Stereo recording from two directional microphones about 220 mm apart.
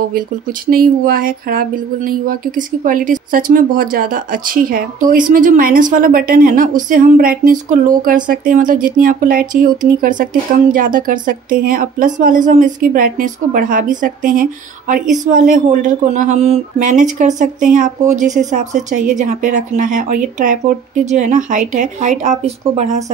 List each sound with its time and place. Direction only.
0.7 s speech: 40° right (ahead or behind)